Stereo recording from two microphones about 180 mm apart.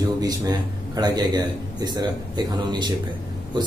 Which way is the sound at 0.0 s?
20° right (ahead or behind).